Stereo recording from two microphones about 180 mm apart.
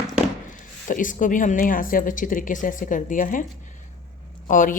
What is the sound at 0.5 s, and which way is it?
Speech, 45° left (ahead or behind).